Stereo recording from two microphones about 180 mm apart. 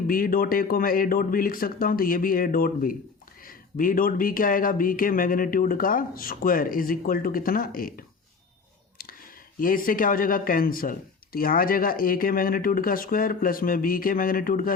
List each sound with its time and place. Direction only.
0.1 s speech: 50° left (ahead or behind)
9.6 s speech: 50° left (ahead or behind)